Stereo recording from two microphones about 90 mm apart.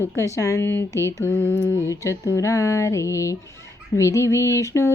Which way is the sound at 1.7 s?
35° left (ahead or behind).